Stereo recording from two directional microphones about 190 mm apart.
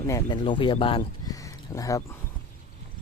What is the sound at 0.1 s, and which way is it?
Speech, 25° left (ahead or behind).